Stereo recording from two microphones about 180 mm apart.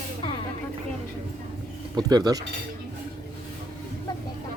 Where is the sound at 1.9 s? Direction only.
20° right (ahead or behind).